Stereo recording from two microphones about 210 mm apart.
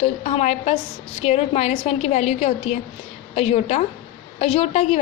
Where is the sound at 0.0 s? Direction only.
30° left (ahead or behind).